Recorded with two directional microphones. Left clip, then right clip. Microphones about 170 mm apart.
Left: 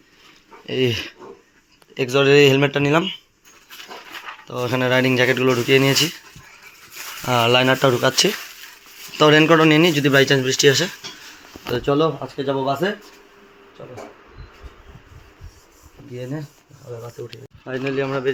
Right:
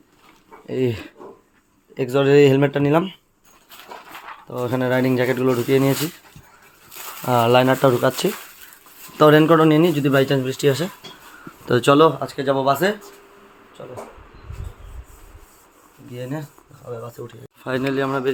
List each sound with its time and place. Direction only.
0.6 s speech: 10° right (ahead or behind)
4.4 s speech: 15° right (ahead or behind)
7.2 s speech: 20° right (ahead or behind)
11.7 s speech: 75° right (ahead or behind)
12.2 s speech: 5° right (ahead or behind)
16.1 s speech: 5° left (ahead or behind)
17.6 s speech: 45° right (ahead or behind)
17.8 s speech: 25° right (ahead or behind)